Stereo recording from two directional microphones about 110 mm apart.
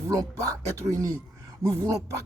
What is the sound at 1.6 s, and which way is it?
Speech, 30° right (ahead or behind).